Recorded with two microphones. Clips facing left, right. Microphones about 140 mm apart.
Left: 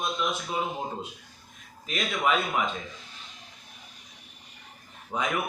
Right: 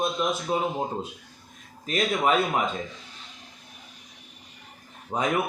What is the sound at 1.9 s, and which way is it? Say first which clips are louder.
Speech: right 4 dB; 40° right (ahead or behind).